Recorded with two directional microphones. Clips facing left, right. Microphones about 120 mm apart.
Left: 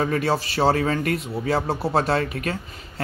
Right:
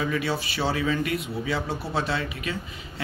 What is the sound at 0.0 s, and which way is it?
A man's voice, 40° left (ahead or behind).